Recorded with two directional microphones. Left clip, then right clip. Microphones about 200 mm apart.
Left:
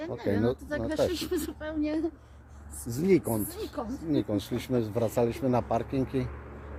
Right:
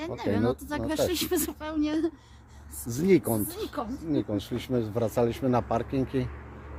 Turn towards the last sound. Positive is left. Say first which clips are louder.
# right 1 dB
turn(degrees=-10)  # may be behind; listen again after turning